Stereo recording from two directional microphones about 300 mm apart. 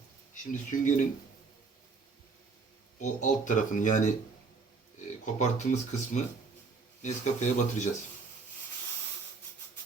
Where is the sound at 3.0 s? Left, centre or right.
Left.